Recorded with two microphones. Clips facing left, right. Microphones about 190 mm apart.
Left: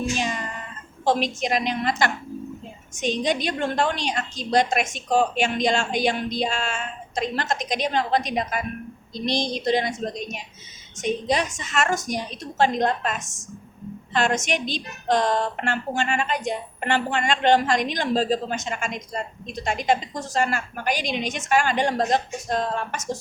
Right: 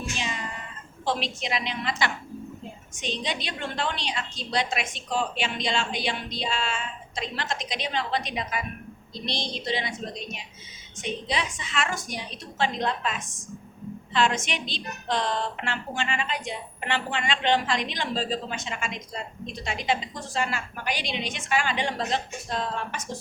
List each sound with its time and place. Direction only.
0.2 s cat: 45° left (ahead or behind)
1.0 s a woman's voice: 45° left (ahead or behind)